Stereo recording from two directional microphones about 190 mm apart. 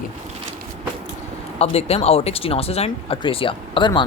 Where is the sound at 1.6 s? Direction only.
35° left (ahead or behind).